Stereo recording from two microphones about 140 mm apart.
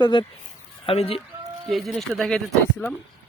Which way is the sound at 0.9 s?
45° left (ahead or behind).